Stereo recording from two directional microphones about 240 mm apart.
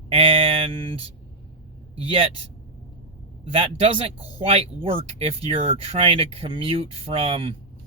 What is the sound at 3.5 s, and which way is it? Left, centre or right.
Speech, right.